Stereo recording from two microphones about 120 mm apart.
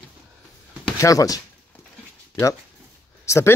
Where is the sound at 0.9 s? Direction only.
30° left (ahead or behind).